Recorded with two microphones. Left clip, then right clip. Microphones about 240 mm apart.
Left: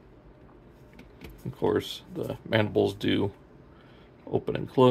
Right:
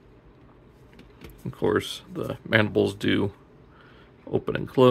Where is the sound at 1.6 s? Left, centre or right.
Centre.